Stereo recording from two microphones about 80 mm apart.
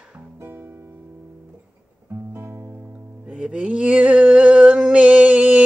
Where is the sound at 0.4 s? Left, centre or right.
Right.